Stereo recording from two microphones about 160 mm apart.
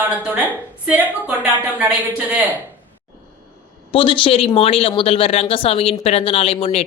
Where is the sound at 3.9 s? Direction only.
35° left (ahead or behind).